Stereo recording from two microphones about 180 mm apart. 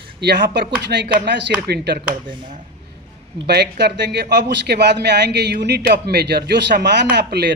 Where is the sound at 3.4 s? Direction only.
70° right (ahead or behind).